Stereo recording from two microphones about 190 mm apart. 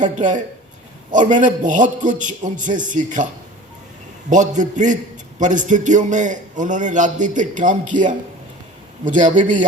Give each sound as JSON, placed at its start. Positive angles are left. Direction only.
{"t": 0.0, "sound": "a man's voice", "side_deg": -40}
{"t": 4.3, "sound": "a man's voice", "side_deg": -40}